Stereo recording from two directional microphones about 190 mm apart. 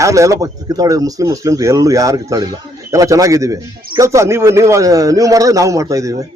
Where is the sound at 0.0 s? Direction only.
15° right (ahead or behind).